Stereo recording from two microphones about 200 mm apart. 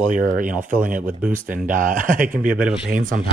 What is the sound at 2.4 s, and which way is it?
Speech, 5° right (ahead or behind).